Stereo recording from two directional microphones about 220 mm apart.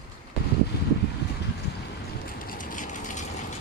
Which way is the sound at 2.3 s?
40° left (ahead or behind).